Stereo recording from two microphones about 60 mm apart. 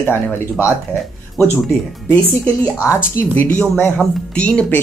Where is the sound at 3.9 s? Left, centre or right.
Centre.